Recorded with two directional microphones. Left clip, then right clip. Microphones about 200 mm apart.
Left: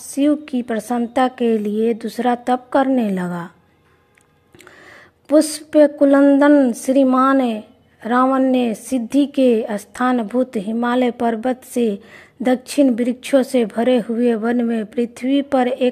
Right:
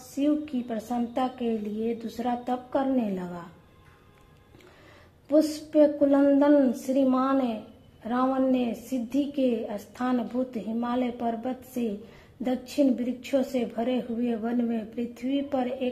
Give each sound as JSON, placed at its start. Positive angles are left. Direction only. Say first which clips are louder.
{"t": 0.2, "sound": "a woman's voice", "louder": "left 9 dB", "side_deg": 40}
{"t": 5.3, "sound": "a woman's voice", "louder": "left 9 dB", "side_deg": 40}